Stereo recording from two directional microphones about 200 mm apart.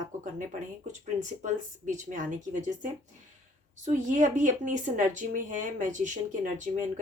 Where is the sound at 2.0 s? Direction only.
40° right (ahead or behind).